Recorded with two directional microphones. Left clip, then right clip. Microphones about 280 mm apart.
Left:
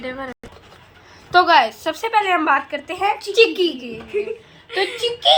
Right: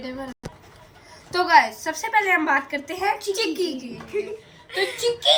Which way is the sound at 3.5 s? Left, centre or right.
Centre.